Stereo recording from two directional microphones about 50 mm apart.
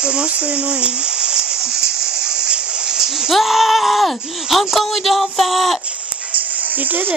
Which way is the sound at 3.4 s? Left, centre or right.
Centre.